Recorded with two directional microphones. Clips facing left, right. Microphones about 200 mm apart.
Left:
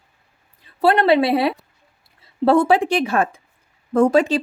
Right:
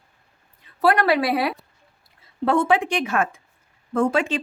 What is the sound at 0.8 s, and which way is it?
Speech, 25° left (ahead or behind).